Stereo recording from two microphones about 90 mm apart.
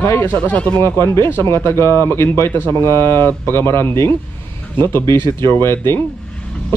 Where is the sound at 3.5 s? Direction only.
25° left (ahead or behind).